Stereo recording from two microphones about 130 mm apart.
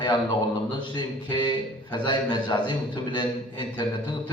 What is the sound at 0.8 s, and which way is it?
A man's voice, 35° left (ahead or behind).